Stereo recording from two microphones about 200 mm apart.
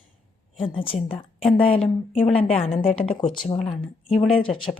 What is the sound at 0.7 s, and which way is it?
A woman's voice, 25° left (ahead or behind).